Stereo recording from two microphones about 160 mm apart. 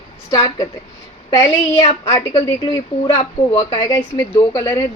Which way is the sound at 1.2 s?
20° left (ahead or behind).